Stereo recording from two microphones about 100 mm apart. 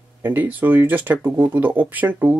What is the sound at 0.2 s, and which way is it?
Speech, 20° right (ahead or behind).